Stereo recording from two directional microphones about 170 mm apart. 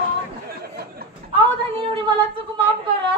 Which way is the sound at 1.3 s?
30° right (ahead or behind).